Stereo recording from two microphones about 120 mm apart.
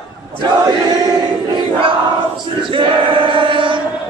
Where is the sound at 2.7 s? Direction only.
45° right (ahead or behind).